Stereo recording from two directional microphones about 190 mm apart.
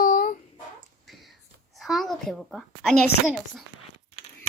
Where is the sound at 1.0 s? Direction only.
Centre (ahead or behind).